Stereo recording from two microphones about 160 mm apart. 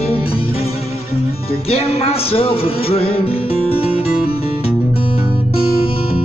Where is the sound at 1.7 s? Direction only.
40° left (ahead or behind).